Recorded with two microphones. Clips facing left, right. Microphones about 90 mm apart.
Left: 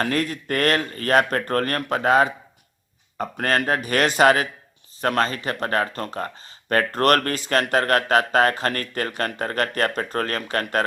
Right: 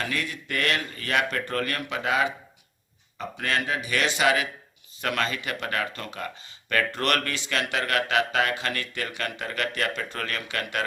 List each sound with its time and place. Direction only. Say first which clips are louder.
0.0 s speech: left 7 dB; 45° left (ahead or behind)